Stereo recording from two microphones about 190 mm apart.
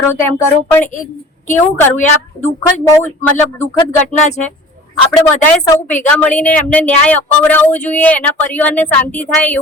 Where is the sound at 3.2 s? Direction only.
10° left (ahead or behind).